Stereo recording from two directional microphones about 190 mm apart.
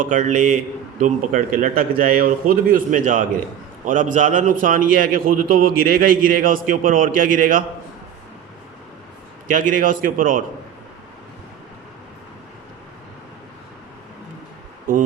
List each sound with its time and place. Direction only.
0.1 s a man's voice: 40° right (ahead or behind)
9.5 s a man's voice: 45° right (ahead or behind)